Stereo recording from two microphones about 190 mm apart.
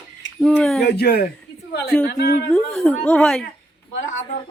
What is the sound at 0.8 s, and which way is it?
A woman's voice, 55° left (ahead or behind).